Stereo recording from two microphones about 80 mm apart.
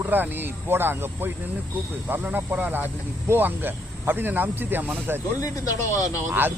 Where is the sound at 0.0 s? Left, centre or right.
Right.